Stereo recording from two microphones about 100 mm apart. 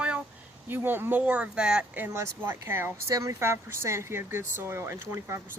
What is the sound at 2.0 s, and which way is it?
Speech, 25° right (ahead or behind).